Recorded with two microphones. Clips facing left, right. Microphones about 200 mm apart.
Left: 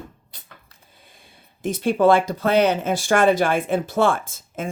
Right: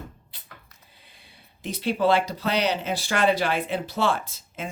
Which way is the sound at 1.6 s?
50° left (ahead or behind).